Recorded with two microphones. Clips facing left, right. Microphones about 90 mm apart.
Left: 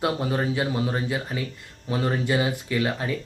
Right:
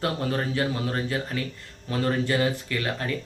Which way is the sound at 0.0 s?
15° left (ahead or behind).